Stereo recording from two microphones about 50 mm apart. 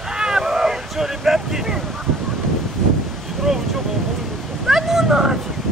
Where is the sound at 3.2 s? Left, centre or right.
Centre.